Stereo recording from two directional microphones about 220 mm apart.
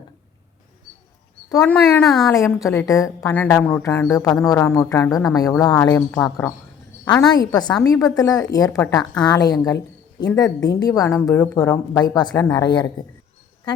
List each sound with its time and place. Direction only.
1.5 s speech: 10° left (ahead or behind)
2.3 s a woman's voice: 15° left (ahead or behind)
10.2 s speech: 5° left (ahead or behind)
10.6 s a woman's voice: 15° left (ahead or behind)